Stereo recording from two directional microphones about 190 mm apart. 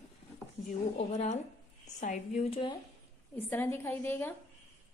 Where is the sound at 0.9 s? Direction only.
35° left (ahead or behind).